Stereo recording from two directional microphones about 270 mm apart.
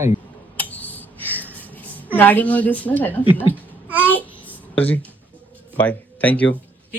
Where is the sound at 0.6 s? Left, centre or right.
Centre.